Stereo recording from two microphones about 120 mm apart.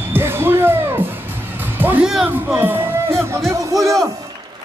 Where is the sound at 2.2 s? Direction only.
15° right (ahead or behind).